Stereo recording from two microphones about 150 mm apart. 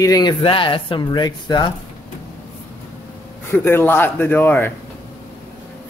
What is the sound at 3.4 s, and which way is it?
Speech, 15° left (ahead or behind).